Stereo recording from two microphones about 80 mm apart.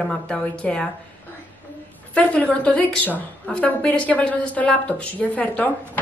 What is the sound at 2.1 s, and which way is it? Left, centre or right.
A woman's voice, centre.